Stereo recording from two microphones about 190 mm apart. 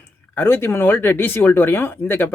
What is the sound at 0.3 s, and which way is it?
Speech, 10° left (ahead or behind).